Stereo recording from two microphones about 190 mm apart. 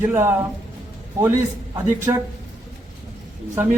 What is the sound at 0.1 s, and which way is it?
Speech, 10° right (ahead or behind).